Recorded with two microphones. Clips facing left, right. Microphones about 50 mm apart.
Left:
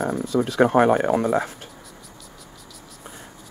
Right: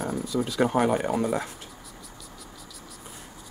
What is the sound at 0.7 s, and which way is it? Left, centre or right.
Speech, left.